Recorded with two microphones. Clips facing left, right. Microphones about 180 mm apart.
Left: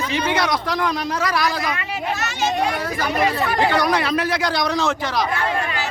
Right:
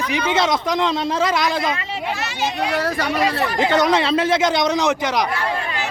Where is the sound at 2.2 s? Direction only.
45° left (ahead or behind).